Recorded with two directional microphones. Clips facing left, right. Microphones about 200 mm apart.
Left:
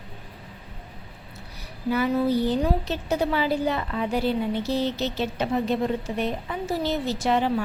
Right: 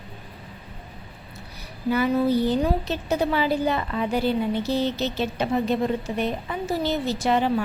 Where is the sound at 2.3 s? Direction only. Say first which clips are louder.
Right 1 dB; 55° right (ahead or behind).